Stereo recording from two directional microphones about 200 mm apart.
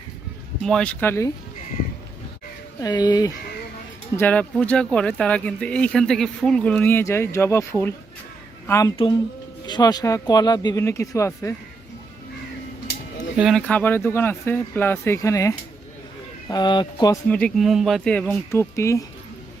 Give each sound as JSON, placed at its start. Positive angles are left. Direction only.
{"t": 0.6, "sound": "speech", "side_deg": 5}
{"t": 2.8, "sound": "speech", "side_deg": 20}
{"t": 4.2, "sound": "speech", "side_deg": 5}
{"t": 9.0, "sound": "speech", "side_deg": 25}
{"t": 13.3, "sound": "speech", "side_deg": 0}
{"t": 17.2, "sound": "speech", "side_deg": 5}